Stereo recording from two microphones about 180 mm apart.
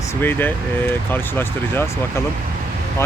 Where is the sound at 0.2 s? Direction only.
10° left (ahead or behind).